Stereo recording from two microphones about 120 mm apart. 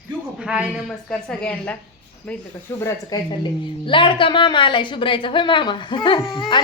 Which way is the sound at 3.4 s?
45° left (ahead or behind).